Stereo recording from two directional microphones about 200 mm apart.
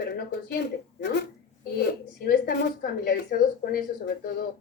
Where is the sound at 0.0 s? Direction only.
50° left (ahead or behind).